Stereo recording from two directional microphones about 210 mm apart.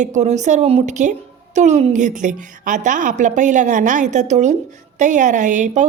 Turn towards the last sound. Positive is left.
turn(degrees=-35)  # may be behind; listen again after turning